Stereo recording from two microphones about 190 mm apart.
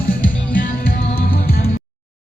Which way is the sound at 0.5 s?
45° left (ahead or behind).